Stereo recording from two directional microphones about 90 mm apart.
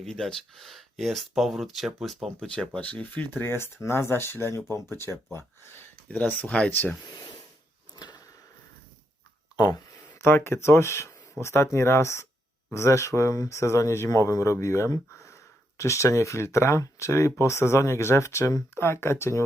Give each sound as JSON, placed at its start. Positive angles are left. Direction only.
{"t": 0.0, "sound": "speech", "side_deg": 5}
{"t": 2.7, "sound": "speech", "side_deg": 15}
{"t": 7.9, "sound": "a sound", "side_deg": 45}
{"t": 9.6, "sound": "speech", "side_deg": 45}
{"t": 10.2, "sound": "speech", "side_deg": 30}